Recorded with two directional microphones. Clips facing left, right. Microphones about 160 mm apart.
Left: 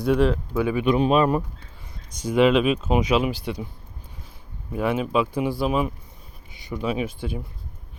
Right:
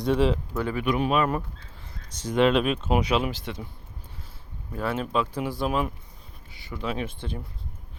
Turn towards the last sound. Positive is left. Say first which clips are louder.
# left 5 dB
turn(degrees=10)  # may be behind; listen again after turning